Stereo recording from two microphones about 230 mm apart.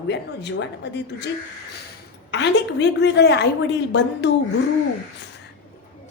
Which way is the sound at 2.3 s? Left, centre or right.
Left.